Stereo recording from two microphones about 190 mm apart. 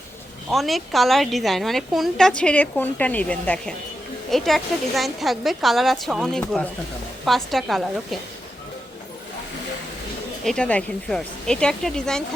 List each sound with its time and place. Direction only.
0.5 s a woman's voice: centre (ahead or behind)
10.4 s a woman's voice: 5° left (ahead or behind)